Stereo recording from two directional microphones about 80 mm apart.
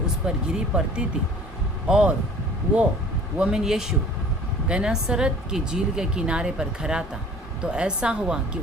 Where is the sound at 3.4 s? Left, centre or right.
Centre.